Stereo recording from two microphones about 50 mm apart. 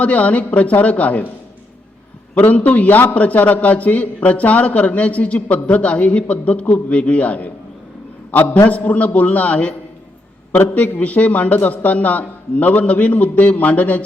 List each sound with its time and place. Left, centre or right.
0.0 s a man's voice: left
2.3 s a man's voice: left
8.7 s a man's voice: left